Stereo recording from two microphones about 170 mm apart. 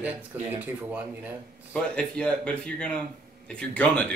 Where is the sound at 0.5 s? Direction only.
10° right (ahead or behind).